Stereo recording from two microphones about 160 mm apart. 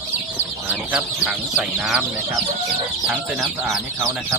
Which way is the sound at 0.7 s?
10° right (ahead or behind).